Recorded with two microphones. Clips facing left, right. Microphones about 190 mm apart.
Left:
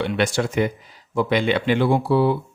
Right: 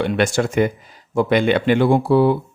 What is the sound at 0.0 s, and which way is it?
Speech, 50° right (ahead or behind).